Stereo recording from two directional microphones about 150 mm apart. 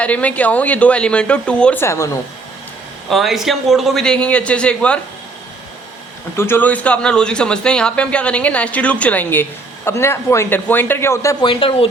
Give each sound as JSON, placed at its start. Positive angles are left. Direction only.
{"t": 0.0, "sound": "speech", "side_deg": 10}
{"t": 3.1, "sound": "a man's voice", "side_deg": 0}
{"t": 6.3, "sound": "speech", "side_deg": 15}
{"t": 11.4, "sound": "speech", "side_deg": 35}